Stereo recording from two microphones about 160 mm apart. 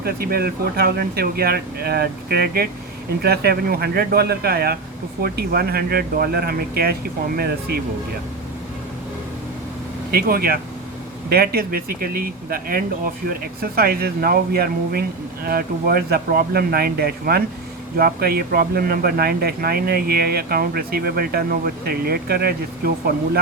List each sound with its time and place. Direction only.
0.0 s speech: 70° right (ahead or behind)
10.1 s speech: 70° right (ahead or behind)